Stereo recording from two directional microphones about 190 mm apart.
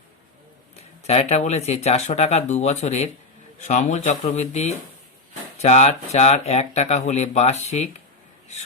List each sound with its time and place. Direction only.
1.0 s speech: 35° left (ahead or behind)